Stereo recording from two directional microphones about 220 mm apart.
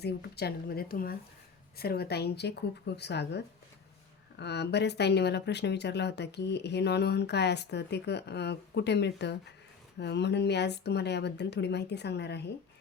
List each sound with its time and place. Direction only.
0.0 s speech: 45° left (ahead or behind)